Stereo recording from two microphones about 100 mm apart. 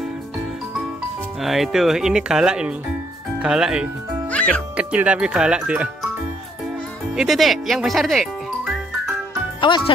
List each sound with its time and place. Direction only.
1.4 s speech: centre (ahead or behind)
4.3 s music: 15° left (ahead or behind)
4.7 s speech: 10° right (ahead or behind)
7.2 s speech: centre (ahead or behind)
9.6 s speech: 55° left (ahead or behind)